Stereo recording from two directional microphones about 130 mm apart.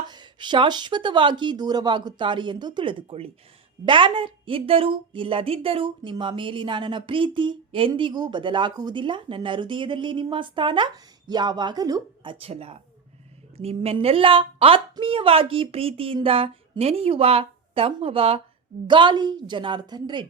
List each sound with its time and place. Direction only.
0.1 s a woman's voice: 35° right (ahead or behind)
18.9 s speech: 35° right (ahead or behind)